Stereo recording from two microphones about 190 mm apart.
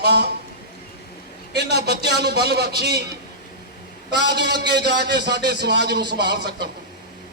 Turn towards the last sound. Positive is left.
turn(degrees=-60)  # may be behind; listen again after turning